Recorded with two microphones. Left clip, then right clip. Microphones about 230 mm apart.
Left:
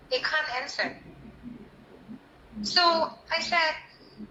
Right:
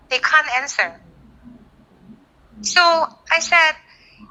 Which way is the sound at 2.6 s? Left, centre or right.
Right.